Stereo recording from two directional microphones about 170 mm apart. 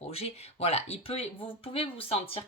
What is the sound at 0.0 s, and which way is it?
Speech, 35° left (ahead or behind).